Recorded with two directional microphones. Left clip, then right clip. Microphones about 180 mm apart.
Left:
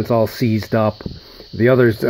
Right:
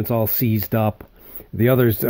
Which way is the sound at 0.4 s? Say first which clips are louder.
Left 4 dB; 60° right (ahead or behind).